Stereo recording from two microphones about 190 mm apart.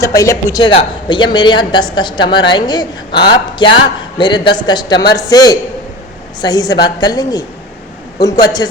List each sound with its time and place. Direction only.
0.0 s a woman's voice: 15° left (ahead or behind)
8.4 s a woman's voice: 20° left (ahead or behind)